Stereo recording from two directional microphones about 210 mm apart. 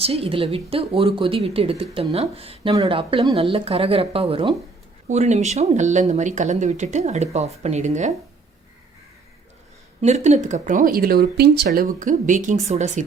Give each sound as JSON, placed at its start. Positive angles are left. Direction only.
{"t": 0.0, "sound": "speech", "side_deg": -25}
{"t": 10.0, "sound": "speech", "side_deg": -35}
{"t": 11.9, "sound": "speech", "side_deg": -35}